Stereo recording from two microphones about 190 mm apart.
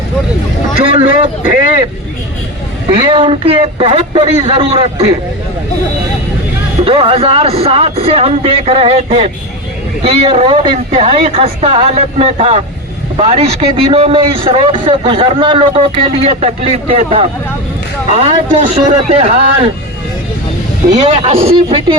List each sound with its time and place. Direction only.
0.9 s a man's voice: 30° right (ahead or behind)
2.9 s a man's voice: 25° right (ahead or behind)
6.8 s a man's voice: 30° right (ahead or behind)
21.1 s a man's voice: 30° right (ahead or behind)